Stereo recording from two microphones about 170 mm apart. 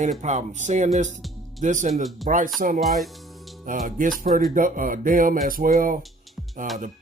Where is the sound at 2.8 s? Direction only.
Centre (ahead or behind).